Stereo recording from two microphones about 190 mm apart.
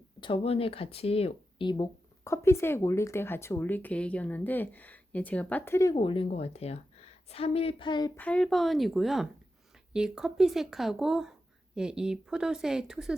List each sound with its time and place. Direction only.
0.2 s speech: 30° left (ahead or behind)
7.3 s a sound: 30° left (ahead or behind)
8.1 s speech: 5° left (ahead or behind)